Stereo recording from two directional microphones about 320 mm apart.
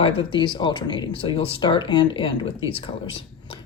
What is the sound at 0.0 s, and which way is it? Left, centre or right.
Speech, centre.